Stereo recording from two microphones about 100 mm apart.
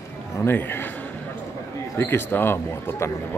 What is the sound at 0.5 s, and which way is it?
Speech, 20° left (ahead or behind).